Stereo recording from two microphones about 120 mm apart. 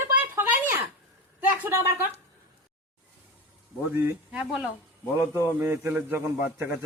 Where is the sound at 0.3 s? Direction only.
15° right (ahead or behind).